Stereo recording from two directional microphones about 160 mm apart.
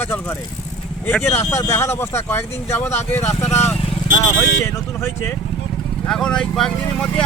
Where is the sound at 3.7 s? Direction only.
35° left (ahead or behind).